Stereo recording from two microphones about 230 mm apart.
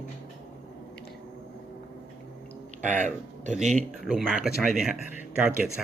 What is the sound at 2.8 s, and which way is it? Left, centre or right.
Speech, right.